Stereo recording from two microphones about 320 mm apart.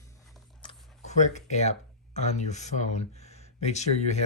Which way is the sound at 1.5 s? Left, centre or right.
Left.